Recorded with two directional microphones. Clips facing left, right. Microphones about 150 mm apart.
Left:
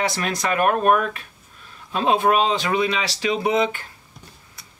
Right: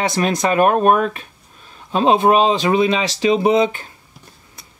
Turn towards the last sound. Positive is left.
turn(degrees=-20)  # may be behind; listen again after turning